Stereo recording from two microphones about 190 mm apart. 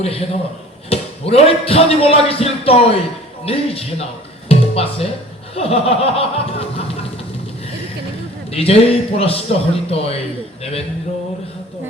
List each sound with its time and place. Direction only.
0.9 s speech: 30° left (ahead or behind)
4.4 s music: 30° left (ahead or behind)
5.5 s speech: 30° left (ahead or behind)
8.5 s speech: 30° left (ahead or behind)
10.6 s a sound: 30° left (ahead or behind)